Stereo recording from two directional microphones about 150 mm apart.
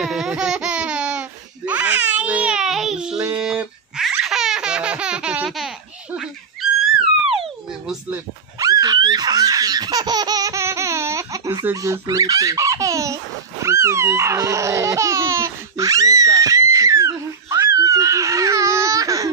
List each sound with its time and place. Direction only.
0.0 s a sound: 5° right (ahead or behind)
1.7 s baby cry: 10° right (ahead or behind)
3.3 s baby laughter: 5° right (ahead or behind)
8.5 s laughter: 25° right (ahead or behind)